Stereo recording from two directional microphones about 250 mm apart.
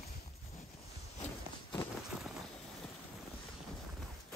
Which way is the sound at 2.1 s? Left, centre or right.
Centre.